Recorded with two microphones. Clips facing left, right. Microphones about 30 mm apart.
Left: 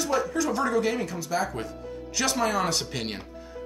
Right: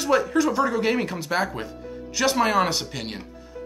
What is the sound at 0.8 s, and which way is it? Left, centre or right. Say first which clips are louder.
Speech: right 4 dB; right.